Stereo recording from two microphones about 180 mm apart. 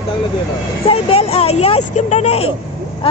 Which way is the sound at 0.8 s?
30° left (ahead or behind).